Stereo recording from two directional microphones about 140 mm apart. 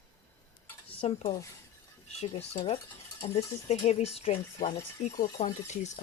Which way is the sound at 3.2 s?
45° left (ahead or behind).